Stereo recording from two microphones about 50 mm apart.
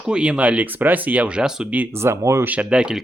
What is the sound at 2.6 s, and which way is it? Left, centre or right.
Speech, centre.